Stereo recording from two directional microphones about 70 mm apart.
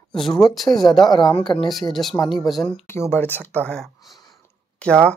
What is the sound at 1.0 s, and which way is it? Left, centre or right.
Speech, left.